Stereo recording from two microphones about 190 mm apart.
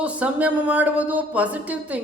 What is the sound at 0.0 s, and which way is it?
Speech, 5° right (ahead or behind).